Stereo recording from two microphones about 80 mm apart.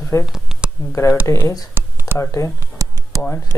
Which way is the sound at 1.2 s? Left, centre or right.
Left.